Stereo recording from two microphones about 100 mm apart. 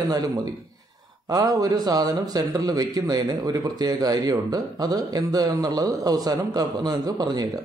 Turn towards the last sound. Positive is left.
turn(degrees=-40)  # may be behind; listen again after turning